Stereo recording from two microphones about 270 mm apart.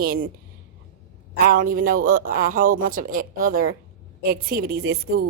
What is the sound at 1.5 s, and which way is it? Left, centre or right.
Speech, right.